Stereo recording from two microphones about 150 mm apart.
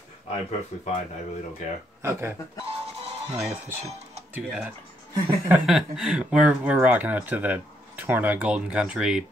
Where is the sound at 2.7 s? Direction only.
40° right (ahead or behind).